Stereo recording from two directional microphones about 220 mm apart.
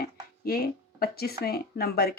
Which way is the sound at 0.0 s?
45° left (ahead or behind).